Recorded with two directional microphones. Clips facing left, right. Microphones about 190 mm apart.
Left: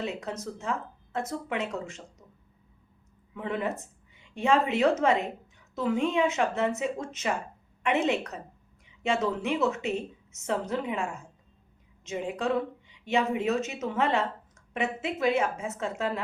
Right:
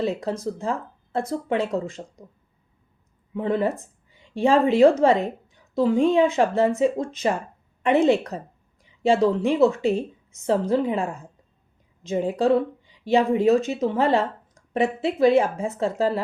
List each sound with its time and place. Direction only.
0.0 s speech: 35° right (ahead or behind)
3.3 s a woman's voice: 35° right (ahead or behind)